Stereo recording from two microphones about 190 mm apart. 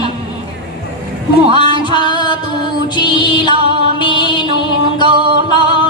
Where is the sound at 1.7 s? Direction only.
25° right (ahead or behind).